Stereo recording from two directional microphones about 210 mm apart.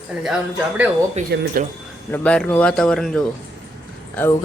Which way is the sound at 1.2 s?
35° right (ahead or behind).